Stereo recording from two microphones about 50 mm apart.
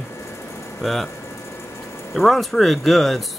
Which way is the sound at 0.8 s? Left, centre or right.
Centre.